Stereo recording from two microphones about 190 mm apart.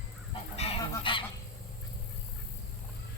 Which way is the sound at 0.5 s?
30° left (ahead or behind).